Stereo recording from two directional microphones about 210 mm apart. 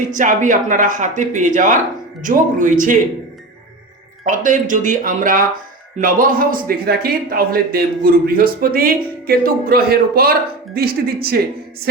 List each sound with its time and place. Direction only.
0.1 s speech: 40° right (ahead or behind)
4.2 s a man's voice: 40° right (ahead or behind)